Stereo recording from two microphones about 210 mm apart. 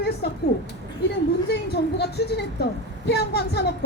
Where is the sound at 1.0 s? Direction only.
50° left (ahead or behind).